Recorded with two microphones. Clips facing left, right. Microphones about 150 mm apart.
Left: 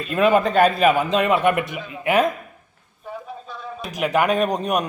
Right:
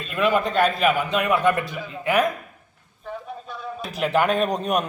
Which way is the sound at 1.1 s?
25° left (ahead or behind).